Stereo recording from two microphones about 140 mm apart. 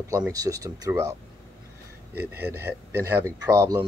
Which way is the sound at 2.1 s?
15° right (ahead or behind).